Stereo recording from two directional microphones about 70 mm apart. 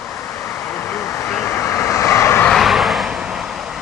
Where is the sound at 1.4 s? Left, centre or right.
Left.